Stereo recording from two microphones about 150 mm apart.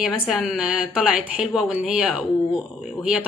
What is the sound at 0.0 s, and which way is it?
Speech, centre (ahead or behind).